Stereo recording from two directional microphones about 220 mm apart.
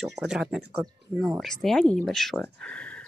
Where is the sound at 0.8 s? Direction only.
20° right (ahead or behind).